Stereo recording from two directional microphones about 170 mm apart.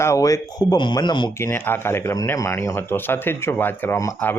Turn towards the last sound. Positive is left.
turn(degrees=15)  # may be behind; listen again after turning